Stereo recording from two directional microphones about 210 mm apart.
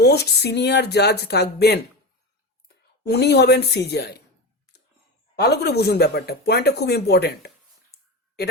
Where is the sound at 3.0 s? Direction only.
50° left (ahead or behind).